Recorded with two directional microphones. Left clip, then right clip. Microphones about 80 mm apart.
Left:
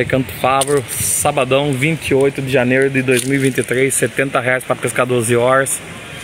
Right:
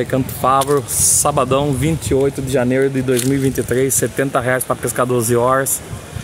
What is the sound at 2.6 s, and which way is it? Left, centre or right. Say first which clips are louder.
Speech: left 2 dB; left.